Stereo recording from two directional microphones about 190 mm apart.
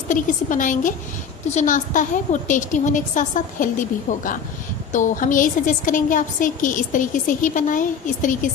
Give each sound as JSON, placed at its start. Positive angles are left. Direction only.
{"t": 0.1, "sound": "a woman's voice", "side_deg": 45}